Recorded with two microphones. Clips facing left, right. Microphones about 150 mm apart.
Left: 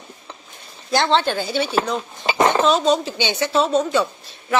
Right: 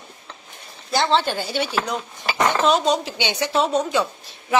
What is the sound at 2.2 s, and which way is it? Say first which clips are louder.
Dishes: left 4 dB; 20° left (ahead or behind).